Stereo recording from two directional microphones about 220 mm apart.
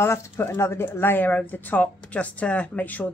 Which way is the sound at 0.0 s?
10° left (ahead or behind).